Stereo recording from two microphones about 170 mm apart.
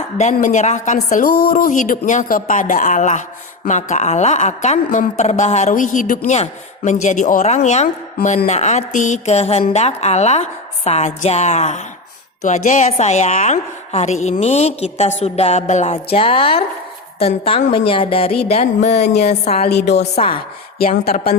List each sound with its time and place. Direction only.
0.3 s a woman's voice: 50° left (ahead or behind)
19.1 s a sound: 75° left (ahead or behind)
19.5 s a woman's voice: 40° left (ahead or behind)
19.7 s a woman's voice: 80° left
20.1 s a woman's voice: 30° left (ahead or behind)
20.7 s a woman's voice: 60° left (ahead or behind)